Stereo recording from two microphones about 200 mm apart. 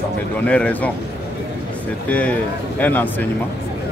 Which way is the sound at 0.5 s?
5° left (ahead or behind).